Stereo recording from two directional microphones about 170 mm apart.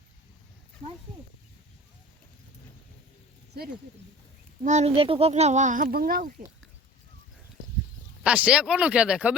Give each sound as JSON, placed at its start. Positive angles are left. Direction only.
{"t": 4.6, "sound": "speech", "side_deg": -40}
{"t": 8.2, "sound": "speech", "side_deg": -5}